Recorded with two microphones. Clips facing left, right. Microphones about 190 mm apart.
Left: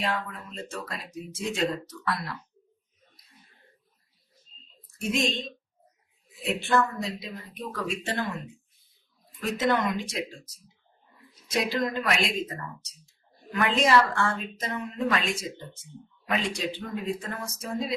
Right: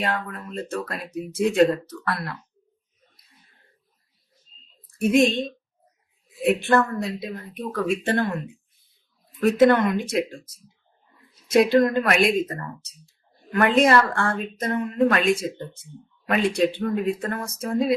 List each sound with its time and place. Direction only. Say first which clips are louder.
0.0 s speech: right 3 dB; 55° right (ahead or behind)
4.9 s speech: right 9 dB; 55° right (ahead or behind)
11.5 s a woman's voice: right 10 dB; 55° right (ahead or behind)